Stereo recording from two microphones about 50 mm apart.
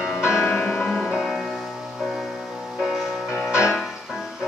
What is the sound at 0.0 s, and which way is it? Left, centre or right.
Music, centre.